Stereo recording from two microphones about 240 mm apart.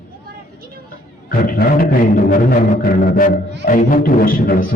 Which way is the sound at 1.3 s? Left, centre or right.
Left.